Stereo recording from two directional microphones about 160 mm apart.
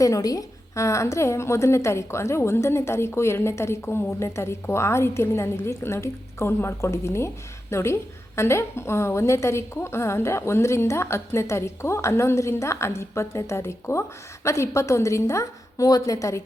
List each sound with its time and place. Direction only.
0.0 s a woman's voice: 20° left (ahead or behind)